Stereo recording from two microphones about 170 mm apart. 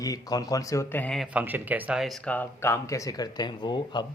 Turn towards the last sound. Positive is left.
turn(degrees=25)  # may be behind; listen again after turning